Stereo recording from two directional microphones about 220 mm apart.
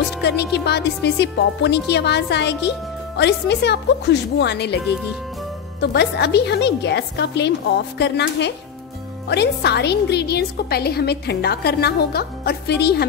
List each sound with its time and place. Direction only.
0.2 s a woman's voice: 50° left (ahead or behind)